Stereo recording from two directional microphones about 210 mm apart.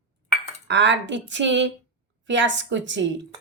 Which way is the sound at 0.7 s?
60° right (ahead or behind).